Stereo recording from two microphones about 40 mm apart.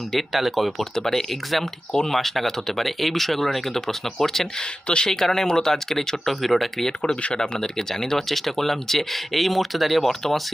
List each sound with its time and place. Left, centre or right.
0.1 s speech: centre
0.9 s speech: centre
4.6 s speech: left
5.1 s speech: centre
7.0 s speech: left; by 10.5 s centre